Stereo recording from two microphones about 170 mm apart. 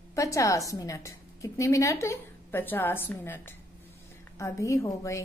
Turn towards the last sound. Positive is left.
turn(degrees=15)  # may be behind; listen again after turning